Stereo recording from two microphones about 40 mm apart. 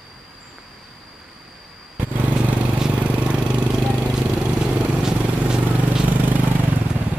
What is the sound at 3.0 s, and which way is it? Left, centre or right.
Vehicle, right.